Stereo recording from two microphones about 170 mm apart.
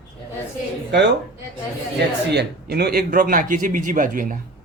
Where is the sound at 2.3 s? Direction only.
75° right (ahead or behind); by 4.4 s 55° right (ahead or behind).